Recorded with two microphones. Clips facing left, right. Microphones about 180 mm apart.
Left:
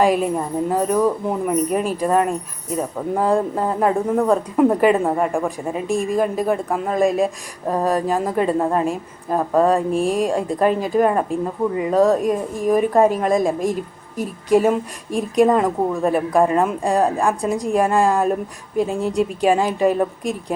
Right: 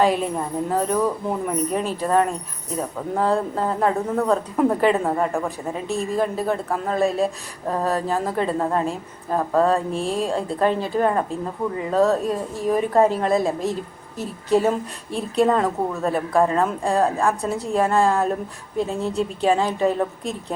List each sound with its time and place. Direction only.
0.0 s a woman's voice: 10° left (ahead or behind)